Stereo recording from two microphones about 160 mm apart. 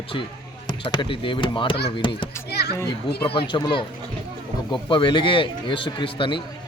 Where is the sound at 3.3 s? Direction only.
30° left (ahead or behind).